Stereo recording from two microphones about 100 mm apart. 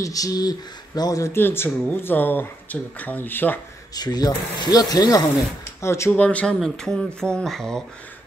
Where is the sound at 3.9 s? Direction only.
40° left (ahead or behind).